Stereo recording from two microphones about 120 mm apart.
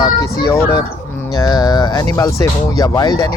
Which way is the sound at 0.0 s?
25° left (ahead or behind).